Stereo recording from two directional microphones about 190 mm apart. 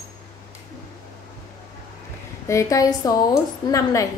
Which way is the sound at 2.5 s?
15° left (ahead or behind).